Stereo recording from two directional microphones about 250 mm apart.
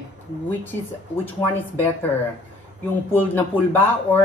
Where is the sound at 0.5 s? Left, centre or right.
Centre.